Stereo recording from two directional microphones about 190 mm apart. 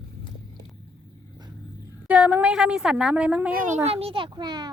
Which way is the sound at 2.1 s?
5° right (ahead or behind).